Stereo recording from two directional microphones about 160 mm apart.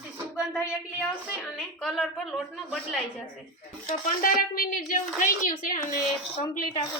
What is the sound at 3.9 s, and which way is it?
A woman's voice, 65° left (ahead or behind).